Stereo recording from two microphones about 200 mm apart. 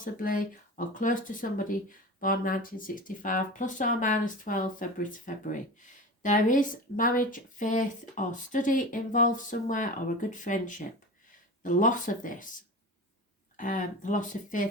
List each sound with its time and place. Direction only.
0.0 s speech: 45° left (ahead or behind)
13.6 s speech: 40° left (ahead or behind)